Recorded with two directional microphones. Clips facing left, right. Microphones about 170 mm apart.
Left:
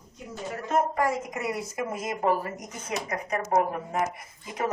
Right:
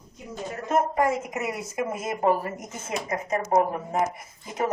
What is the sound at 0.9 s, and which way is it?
A woman's voice, 20° right (ahead or behind).